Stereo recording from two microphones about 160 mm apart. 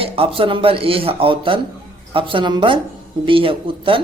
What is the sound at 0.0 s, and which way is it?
Speech, 35° right (ahead or behind).